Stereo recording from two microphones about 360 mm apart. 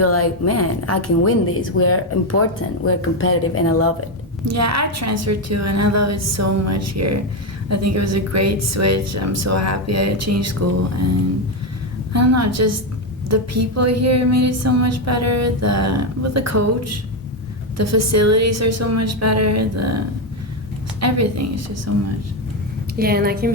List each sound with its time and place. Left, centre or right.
0.0 s a woman's voice: left
4.4 s a woman's voice: right
12.1 s a woman's voice: right
21.0 s a woman's voice: right
23.0 s a woman's voice: right